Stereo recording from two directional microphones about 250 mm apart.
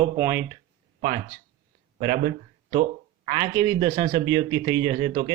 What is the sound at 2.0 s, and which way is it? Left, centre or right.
Speech, right.